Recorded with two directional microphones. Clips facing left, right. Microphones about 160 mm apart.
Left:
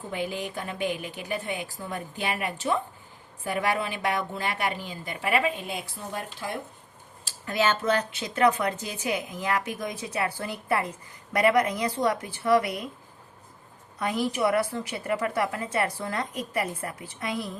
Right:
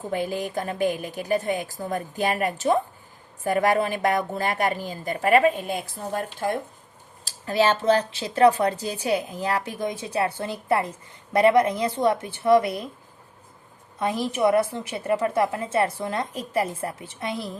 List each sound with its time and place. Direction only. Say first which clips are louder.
0.1 s a woman's voice: right 5 dB; 40° right (ahead or behind)
7.3 s a woman's voice: right 4 dB; 35° right (ahead or behind)
14.0 s a woman's voice: right 3 dB; 25° right (ahead or behind)